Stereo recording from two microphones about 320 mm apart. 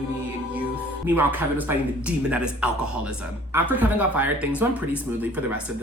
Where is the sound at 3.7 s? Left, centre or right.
Centre.